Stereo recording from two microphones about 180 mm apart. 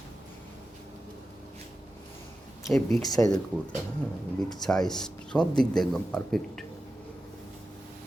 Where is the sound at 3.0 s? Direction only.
20° left (ahead or behind).